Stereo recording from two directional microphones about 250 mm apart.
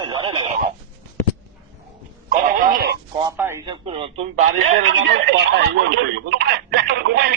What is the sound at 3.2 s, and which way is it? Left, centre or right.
A man's voice, centre.